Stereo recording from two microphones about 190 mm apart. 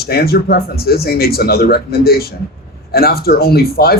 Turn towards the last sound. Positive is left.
turn(degrees=55)  # may be behind; listen again after turning